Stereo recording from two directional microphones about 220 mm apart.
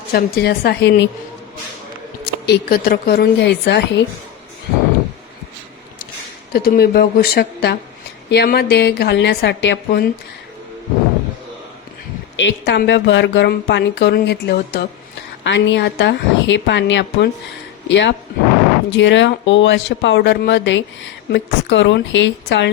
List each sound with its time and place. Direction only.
0.1 s speech: 45° left (ahead or behind)
2.2 s speech: 45° left (ahead or behind)
6.5 s speech: 45° left (ahead or behind)
12.4 s speech: 55° left (ahead or behind)